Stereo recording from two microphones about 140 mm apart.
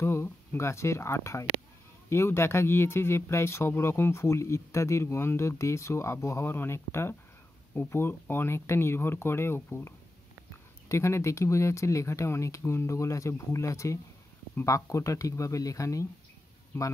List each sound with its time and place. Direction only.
0.0 s speech: 20° left (ahead or behind)